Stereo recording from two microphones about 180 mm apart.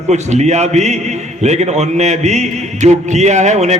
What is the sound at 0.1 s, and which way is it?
A man's voice, 40° right (ahead or behind).